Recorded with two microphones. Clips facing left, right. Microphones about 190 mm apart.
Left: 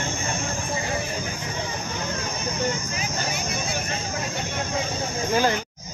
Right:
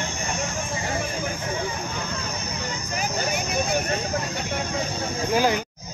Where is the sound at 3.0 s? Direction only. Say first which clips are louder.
Right 4 dB; 60° right (ahead or behind).